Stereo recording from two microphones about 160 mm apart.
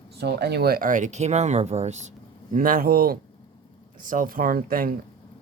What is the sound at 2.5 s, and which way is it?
Speech, 60° right (ahead or behind).